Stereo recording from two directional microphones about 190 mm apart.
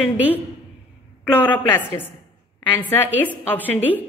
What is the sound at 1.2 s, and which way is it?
A woman's voice, 10° left (ahead or behind).